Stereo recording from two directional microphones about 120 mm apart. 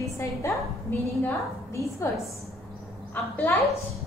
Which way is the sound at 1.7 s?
25° left (ahead or behind).